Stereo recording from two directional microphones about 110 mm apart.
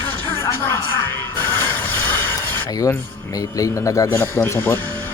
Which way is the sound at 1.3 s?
20° left (ahead or behind).